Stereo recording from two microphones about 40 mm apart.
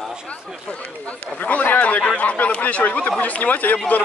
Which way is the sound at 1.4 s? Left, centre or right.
Left.